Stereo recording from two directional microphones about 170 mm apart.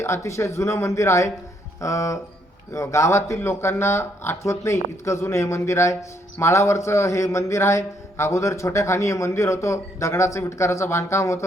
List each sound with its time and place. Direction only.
0.0 s speech: 15° left (ahead or behind)